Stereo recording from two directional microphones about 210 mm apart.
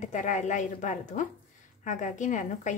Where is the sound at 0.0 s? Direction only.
35° left (ahead or behind).